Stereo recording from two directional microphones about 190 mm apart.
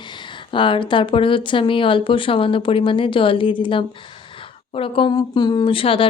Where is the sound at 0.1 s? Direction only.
25° left (ahead or behind).